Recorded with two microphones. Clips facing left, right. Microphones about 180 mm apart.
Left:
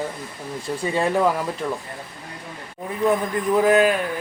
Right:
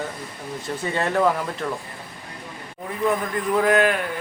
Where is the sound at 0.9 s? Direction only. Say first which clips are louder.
Left 1 dB; 5° left (ahead or behind).